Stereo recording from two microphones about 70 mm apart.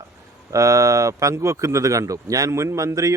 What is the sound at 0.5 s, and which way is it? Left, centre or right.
Speech, right.